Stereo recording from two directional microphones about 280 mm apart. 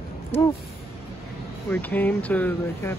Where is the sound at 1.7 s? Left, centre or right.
Centre.